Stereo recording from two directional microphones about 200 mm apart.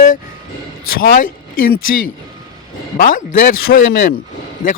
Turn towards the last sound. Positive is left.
turn(degrees=45)  # may be behind; listen again after turning